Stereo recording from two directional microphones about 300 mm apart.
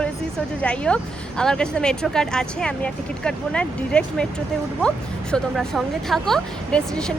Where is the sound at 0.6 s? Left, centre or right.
Centre.